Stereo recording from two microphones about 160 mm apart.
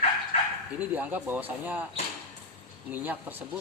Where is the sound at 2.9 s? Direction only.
10° right (ahead or behind).